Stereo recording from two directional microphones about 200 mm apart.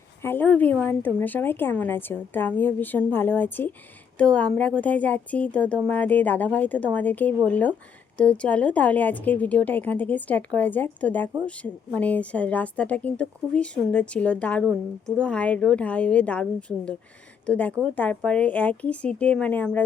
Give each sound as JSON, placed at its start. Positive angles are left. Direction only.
{"t": 0.2, "sound": "a woman's voice", "side_deg": 10}